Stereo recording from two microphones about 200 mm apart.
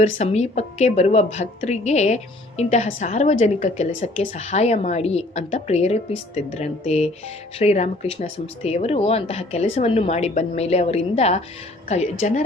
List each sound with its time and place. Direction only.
0.0 s a woman's voice: 30° left (ahead or behind)